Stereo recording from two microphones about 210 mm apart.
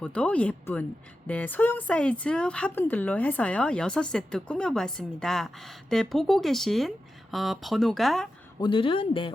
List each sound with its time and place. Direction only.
0.0 s speech: 5° left (ahead or behind)
8.6 s a man's voice: 25° left (ahead or behind)